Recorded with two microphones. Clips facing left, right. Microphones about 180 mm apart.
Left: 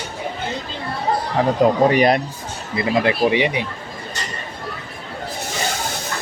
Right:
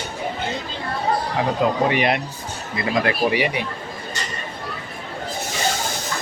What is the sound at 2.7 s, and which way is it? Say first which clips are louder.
Speech: left 3 dB; 25° left (ahead or behind).